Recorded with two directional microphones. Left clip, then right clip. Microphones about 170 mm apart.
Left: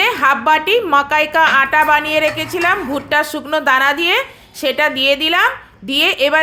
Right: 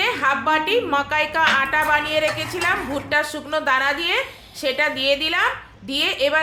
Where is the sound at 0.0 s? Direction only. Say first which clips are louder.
Left 6 dB; 40° left (ahead or behind).